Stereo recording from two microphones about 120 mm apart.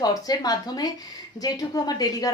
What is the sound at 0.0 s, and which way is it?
A woman's voice, 30° left (ahead or behind).